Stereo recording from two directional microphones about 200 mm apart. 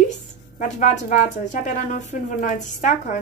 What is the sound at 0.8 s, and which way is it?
A woman's voice, 40° left (ahead or behind).